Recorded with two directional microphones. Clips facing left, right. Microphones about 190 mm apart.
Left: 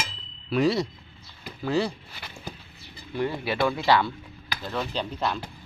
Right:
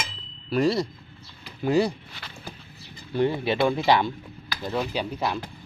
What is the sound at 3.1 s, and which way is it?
Speech, 20° right (ahead or behind).